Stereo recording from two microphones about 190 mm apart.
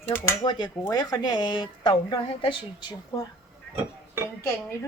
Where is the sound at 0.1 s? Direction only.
20° left (ahead or behind).